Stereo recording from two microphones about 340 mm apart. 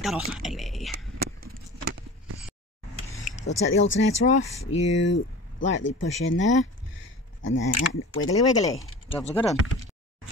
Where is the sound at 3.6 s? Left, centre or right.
Left.